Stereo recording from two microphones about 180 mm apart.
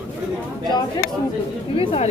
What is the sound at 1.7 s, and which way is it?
Speech, 30° left (ahead or behind).